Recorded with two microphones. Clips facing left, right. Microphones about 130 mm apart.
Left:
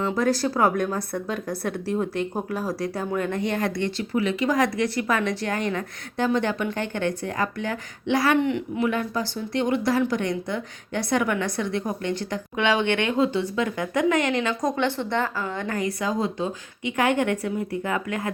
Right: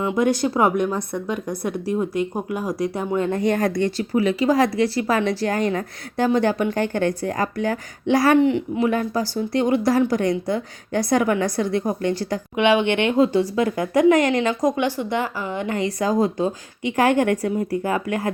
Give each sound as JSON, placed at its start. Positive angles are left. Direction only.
{"t": 0.0, "sound": "speech", "side_deg": -15}
{"t": 3.4, "sound": "speech", "side_deg": -40}
{"t": 12.5, "sound": "speech", "side_deg": -15}
{"t": 13.1, "sound": "speech", "side_deg": -35}
{"t": 14.6, "sound": "speech", "side_deg": -10}
{"t": 15.8, "sound": "speech", "side_deg": -40}